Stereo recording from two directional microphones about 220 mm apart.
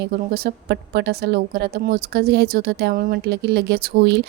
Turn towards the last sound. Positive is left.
turn(degrees=-45)  # may be behind; listen again after turning